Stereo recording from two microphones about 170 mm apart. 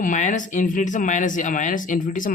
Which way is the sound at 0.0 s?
50° left (ahead or behind).